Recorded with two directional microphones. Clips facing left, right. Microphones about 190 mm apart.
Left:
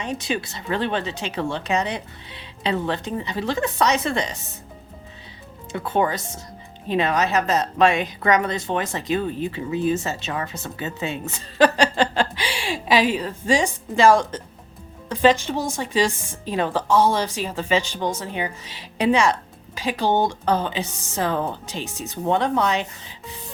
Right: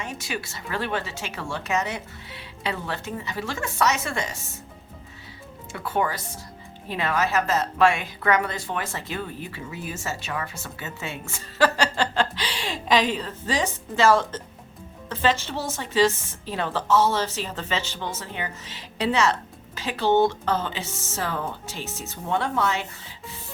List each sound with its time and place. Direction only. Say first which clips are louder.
0.0 s a woman's voice: left 6 dB; 20° left (ahead or behind)
2.6 s a woman's voice: left 6 dB; 20° left (ahead or behind)
5.7 s a woman's voice: left 4 dB; 25° left (ahead or behind)